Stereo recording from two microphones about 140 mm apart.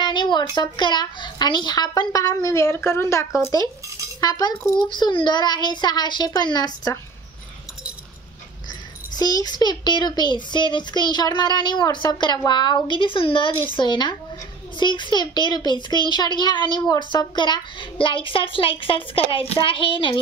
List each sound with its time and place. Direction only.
0.0 s a child's voice: 35° left (ahead or behind)
9.1 s a child's voice: 30° left (ahead or behind)